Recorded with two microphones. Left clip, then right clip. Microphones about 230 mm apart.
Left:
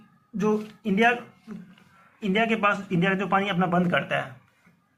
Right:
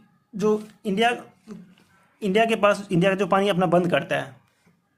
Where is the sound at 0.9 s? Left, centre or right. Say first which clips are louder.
Even; right.